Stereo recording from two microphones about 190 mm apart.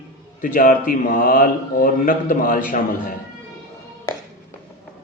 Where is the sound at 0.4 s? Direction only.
45° left (ahead or behind).